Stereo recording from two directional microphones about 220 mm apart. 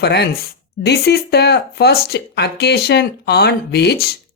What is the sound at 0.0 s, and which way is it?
Speech, 50° left (ahead or behind).